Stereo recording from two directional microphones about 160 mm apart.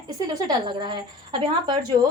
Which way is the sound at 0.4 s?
30° right (ahead or behind).